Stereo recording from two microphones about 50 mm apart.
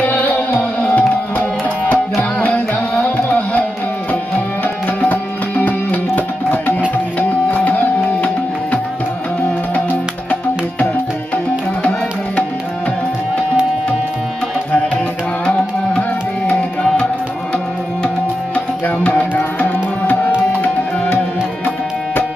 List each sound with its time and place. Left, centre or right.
0.0 s music: left
4.8 s music: left
6.1 s tabla: left
7.2 s music: left
18.5 s music: left